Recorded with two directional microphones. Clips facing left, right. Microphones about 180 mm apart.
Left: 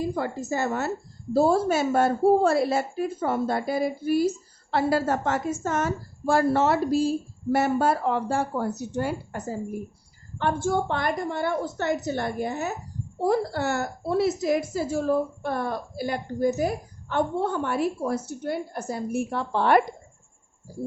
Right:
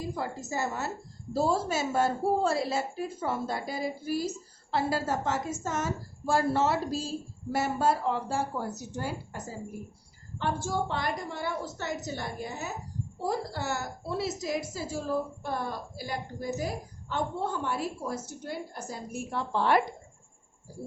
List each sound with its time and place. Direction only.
0.1 s a woman's voice: 65° left (ahead or behind)